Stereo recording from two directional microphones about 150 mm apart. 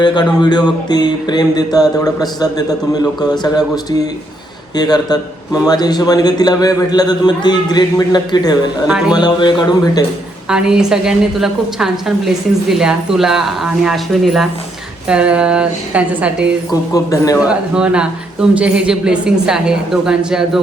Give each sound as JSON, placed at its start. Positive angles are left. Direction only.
{"t": 0.0, "sound": "music", "side_deg": 30}
{"t": 8.9, "sound": "a woman's voice", "side_deg": -5}
{"t": 9.1, "sound": "music", "side_deg": 30}
{"t": 10.5, "sound": "a woman's voice", "side_deg": -5}
{"t": 16.9, "sound": "music", "side_deg": 25}
{"t": 17.4, "sound": "a woman's voice", "side_deg": -5}